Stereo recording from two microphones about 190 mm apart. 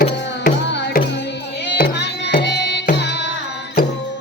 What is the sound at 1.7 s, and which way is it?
Music, 50° left (ahead or behind).